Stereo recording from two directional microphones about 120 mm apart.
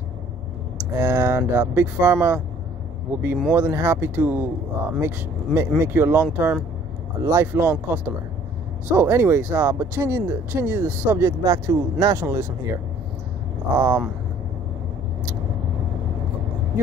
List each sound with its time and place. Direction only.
0.9 s speech: 15° right (ahead or behind)